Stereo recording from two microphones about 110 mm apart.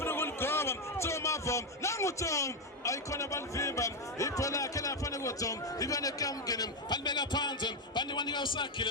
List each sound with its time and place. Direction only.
0.0 s a man's voice: 20° left (ahead or behind); by 8.9 s 45° left (ahead or behind)